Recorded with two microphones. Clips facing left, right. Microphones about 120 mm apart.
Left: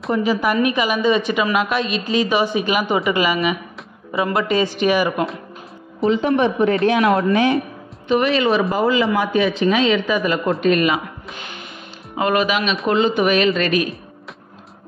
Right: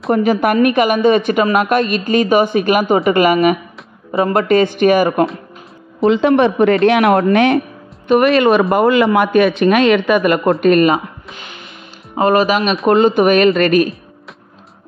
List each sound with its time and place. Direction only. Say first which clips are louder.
0.1 s a woman's voice: right 5 dB; 55° right (ahead or behind)
6.0 s speech: right 5 dB; 80° right
8.1 s speech: right 6 dB; 55° right (ahead or behind)
10.6 s a woman's voice: right 5 dB; 45° right (ahead or behind)
12.2 s a woman's voice: right 5 dB; 40° right (ahead or behind)